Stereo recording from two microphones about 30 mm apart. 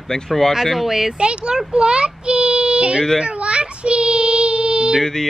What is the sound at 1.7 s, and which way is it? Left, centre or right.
Child singing, right.